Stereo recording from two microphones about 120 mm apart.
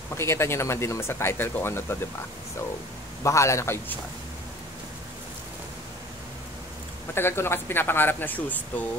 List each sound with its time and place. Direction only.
0.1 s speech: 20° left (ahead or behind)
3.3 s speech: 25° left (ahead or behind)
7.2 s speech: 20° left (ahead or behind)